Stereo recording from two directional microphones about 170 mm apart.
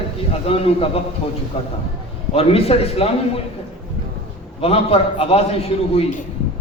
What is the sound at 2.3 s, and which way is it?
Speech, 35° left (ahead or behind).